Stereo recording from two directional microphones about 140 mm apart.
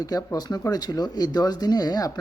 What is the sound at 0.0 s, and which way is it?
Speech, 25° left (ahead or behind).